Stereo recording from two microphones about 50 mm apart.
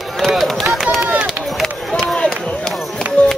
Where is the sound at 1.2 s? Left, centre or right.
Centre.